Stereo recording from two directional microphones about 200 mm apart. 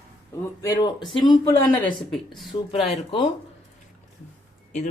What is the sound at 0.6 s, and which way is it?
Speech, 20° left (ahead or behind).